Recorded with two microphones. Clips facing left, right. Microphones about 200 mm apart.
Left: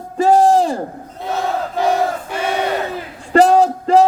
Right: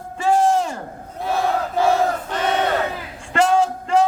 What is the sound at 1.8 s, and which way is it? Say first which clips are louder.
Battle cry: left 1 dB; 15° left (ahead or behind).